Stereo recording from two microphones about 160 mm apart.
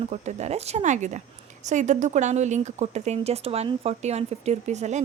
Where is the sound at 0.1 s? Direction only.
45° right (ahead or behind).